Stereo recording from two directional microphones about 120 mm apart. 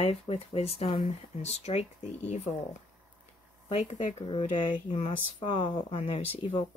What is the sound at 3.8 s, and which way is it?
Speech, 80° left.